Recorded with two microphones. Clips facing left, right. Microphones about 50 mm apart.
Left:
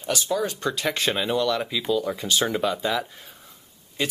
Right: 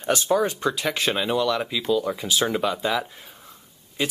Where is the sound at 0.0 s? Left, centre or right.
Right.